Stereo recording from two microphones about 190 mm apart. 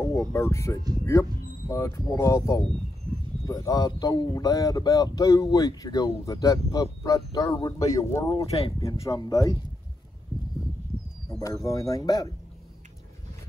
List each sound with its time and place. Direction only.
0.0 s speech: 15° left (ahead or behind)
8.4 s speech: 30° left (ahead or behind)
9.0 s speech: 15° left (ahead or behind)
11.3 s speech: 15° left (ahead or behind)